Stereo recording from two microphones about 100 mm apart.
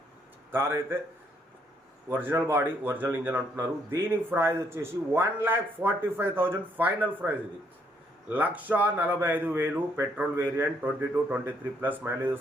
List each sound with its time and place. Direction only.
0.5 s speech: 25° right (ahead or behind)
2.1 s speech: 20° right (ahead or behind)